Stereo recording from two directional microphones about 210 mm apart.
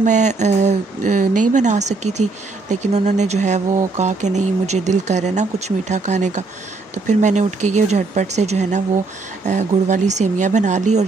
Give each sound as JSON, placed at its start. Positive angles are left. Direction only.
{"t": 0.0, "sound": "speech", "side_deg": -35}